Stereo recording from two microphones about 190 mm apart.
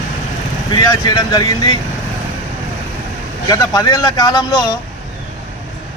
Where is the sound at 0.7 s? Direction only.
20° left (ahead or behind).